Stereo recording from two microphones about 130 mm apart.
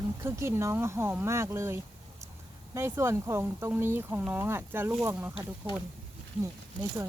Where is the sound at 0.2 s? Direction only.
20° right (ahead or behind).